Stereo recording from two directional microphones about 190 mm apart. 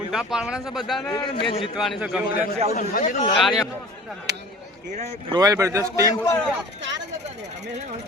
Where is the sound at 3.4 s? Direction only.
Centre (ahead or behind).